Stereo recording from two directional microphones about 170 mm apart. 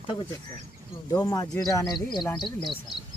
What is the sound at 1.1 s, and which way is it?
Speech, 20° left (ahead or behind).